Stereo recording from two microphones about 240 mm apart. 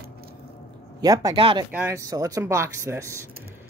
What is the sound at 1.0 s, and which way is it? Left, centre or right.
Speech, centre.